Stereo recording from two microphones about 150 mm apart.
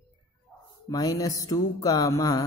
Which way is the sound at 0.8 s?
25° left (ahead or behind).